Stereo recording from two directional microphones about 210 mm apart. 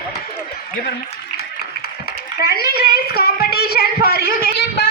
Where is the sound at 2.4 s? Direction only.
50° left (ahead or behind).